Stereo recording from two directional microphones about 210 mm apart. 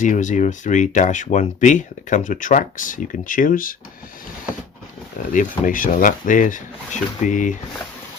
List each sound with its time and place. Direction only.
0.0 s speech: 35° left (ahead or behind)
5.3 s speech: 40° left (ahead or behind)